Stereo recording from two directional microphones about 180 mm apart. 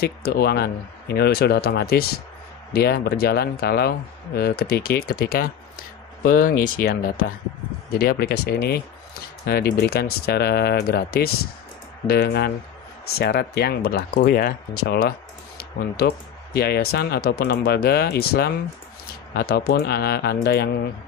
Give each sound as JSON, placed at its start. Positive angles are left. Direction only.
{"t": 0.0, "sound": "speech", "side_deg": 60}